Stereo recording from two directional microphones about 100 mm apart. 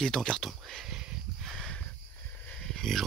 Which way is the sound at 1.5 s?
5° left (ahead or behind).